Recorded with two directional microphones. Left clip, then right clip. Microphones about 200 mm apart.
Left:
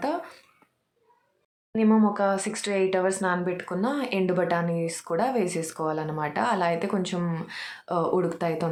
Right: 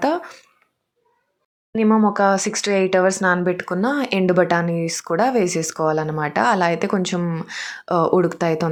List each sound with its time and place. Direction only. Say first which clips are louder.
0.0 s speech: right 8 dB; 35° right (ahead or behind)
1.7 s speech: right 6 dB; 30° right (ahead or behind)
7.4 s speech: right 8 dB; 30° right (ahead or behind)